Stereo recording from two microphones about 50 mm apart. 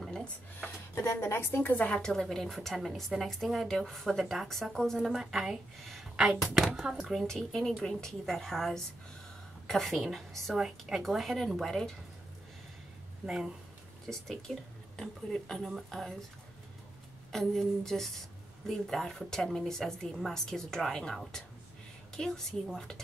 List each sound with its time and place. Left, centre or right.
0.0 s a sound: centre
0.9 s speech: left
1.6 s a woman's voice: left
2.0 s a woman's voice: centre
2.7 s a woman's voice: centre
3.6 s a woman's voice: centre
4.9 s a woman's voice: centre
6.7 s speech: centre
7.2 s a woman's voice: centre
13.2 s speech: centre
14.0 s a woman's voice: centre
17.3 s a woman's voice: centre